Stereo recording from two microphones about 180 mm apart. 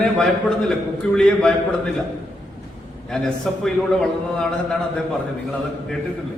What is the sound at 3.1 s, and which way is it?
A man's voice, 5° left (ahead or behind).